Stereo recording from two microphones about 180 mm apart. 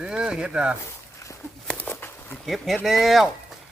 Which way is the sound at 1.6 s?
10° left (ahead or behind).